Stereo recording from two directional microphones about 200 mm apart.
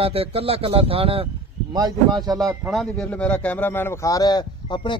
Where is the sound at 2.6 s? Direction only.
Centre (ahead or behind).